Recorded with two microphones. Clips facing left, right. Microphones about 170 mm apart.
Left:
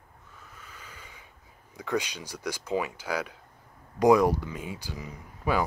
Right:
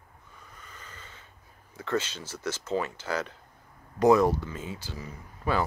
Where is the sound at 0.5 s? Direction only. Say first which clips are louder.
Even; 10° left (ahead or behind).